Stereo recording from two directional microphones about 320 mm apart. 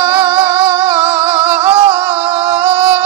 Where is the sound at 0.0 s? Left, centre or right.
Centre.